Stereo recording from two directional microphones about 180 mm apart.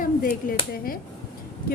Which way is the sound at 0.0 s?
50° left (ahead or behind).